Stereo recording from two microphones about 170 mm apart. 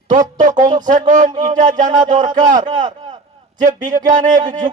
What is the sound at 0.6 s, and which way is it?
A man's voice, 50° right (ahead or behind).